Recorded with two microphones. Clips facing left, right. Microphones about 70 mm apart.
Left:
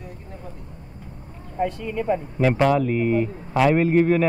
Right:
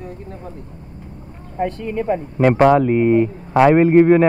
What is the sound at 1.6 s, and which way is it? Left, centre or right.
A man's voice, right.